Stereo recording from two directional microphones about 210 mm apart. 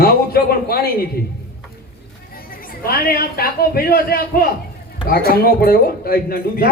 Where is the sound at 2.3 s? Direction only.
45° left (ahead or behind).